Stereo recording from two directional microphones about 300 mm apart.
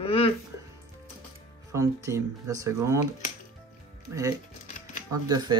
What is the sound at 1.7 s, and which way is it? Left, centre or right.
Speech, centre.